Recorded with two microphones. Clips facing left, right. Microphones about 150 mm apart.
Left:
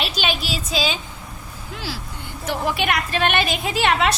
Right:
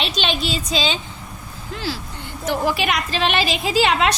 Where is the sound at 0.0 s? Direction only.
5° left (ahead or behind).